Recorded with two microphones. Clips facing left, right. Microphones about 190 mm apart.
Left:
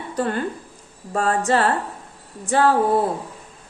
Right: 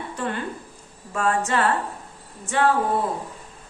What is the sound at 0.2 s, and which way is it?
Speech, 40° left (ahead or behind).